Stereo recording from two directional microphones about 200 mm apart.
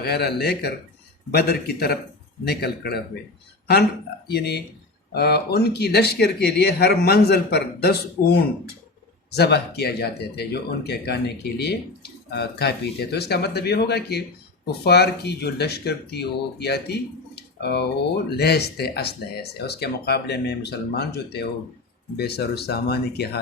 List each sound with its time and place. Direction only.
0.0 s speech: 55° left (ahead or behind)
4.3 s speech: 55° left (ahead or behind)
9.3 s speech: 55° left (ahead or behind)